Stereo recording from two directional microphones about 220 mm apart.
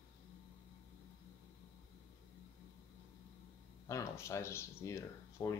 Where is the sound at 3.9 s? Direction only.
15° left (ahead or behind).